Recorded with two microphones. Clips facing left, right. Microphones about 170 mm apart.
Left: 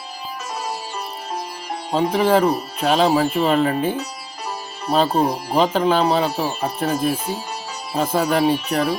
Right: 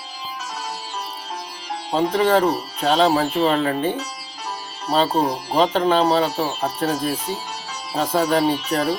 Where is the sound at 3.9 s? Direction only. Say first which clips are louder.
Left 2 dB; 50° left (ahead or behind).